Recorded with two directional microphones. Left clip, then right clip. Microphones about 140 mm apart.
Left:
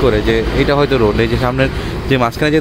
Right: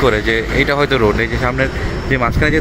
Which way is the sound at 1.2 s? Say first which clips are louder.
Left 2 dB; 30° left (ahead or behind).